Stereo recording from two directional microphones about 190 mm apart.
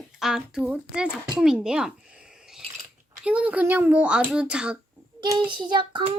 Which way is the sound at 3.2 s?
5° right (ahead or behind).